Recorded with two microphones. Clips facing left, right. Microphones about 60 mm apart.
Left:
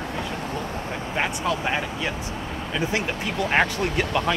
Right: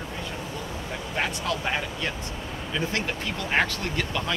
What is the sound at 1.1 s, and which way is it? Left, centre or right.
Speech, centre.